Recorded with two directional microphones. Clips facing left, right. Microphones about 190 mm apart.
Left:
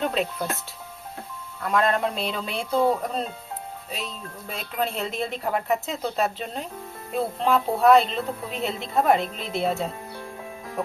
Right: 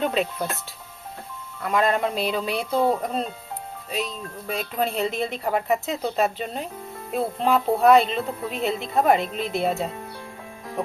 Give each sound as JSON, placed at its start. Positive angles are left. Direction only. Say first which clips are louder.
{"t": 0.0, "sound": "speech", "louder": "right 2 dB", "side_deg": 0}
{"t": 1.6, "sound": "speech", "louder": "right 1 dB", "side_deg": -5}
{"t": 3.9, "sound": "speech", "louder": "right 7 dB", "side_deg": 0}